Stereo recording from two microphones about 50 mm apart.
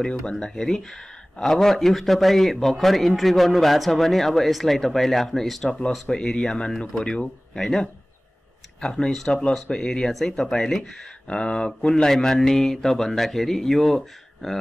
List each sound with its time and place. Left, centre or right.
0.0 s mantra: centre
1.4 s a man's voice: centre
6.0 s mantra: centre
8.9 s a man's voice: centre
9.3 s mantra: centre
11.2 s mantra: centre